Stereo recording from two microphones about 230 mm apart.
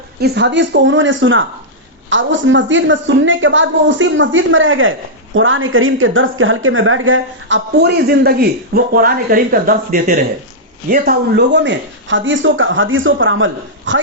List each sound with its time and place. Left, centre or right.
0.2 s a woman's voice: right